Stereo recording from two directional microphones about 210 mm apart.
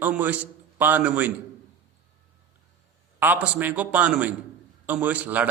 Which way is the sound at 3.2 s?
10° right (ahead or behind).